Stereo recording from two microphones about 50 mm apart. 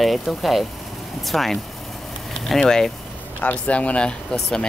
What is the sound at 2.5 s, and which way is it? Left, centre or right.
Speech, centre.